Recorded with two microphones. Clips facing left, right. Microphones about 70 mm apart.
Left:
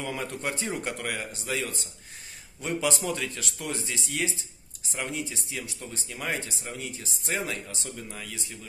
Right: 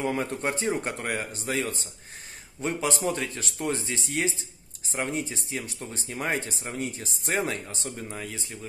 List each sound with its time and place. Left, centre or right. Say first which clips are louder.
0.0 s speech: right 4 dB; right